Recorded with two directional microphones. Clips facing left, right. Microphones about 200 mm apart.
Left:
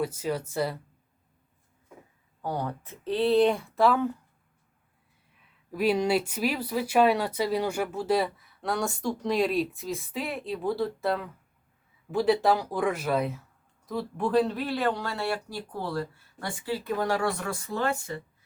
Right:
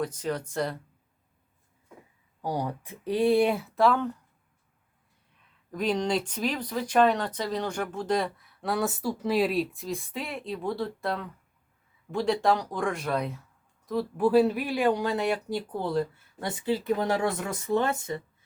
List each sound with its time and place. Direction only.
0.0 s speech: 5° left (ahead or behind)
2.4 s speech: 15° right (ahead or behind); by 4.1 s 5° left (ahead or behind)
5.7 s speech: 10° left (ahead or behind); by 18.2 s 20° right (ahead or behind)